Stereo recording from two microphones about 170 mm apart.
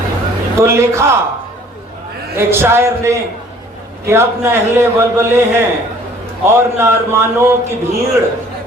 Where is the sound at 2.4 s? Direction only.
15° right (ahead or behind).